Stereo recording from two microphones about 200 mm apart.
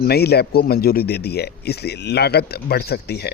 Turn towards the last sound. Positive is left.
turn(degrees=55)  # may be behind; listen again after turning